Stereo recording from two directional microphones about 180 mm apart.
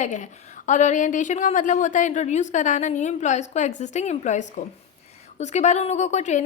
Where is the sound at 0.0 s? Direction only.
45° left (ahead or behind).